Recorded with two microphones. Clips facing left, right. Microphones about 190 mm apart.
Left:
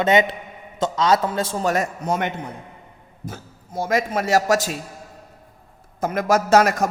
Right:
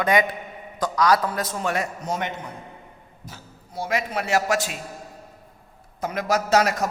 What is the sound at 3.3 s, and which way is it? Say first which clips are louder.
A woman's voice: left 8 dB; 45° left (ahead or behind).